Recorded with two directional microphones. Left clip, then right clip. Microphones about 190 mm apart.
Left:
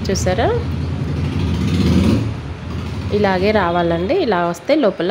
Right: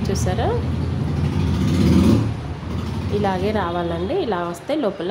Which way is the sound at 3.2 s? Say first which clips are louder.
Left 7 dB; 25° left (ahead or behind).